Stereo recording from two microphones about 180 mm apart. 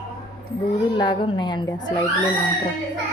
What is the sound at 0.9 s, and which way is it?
Speech, 25° left (ahead or behind).